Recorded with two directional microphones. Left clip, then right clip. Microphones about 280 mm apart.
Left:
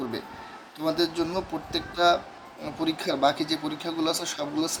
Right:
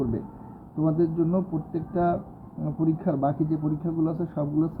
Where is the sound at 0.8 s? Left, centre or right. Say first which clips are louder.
Right 1 dB; left.